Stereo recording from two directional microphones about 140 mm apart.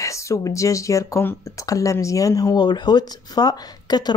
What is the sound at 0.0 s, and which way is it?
Speech, 20° left (ahead or behind).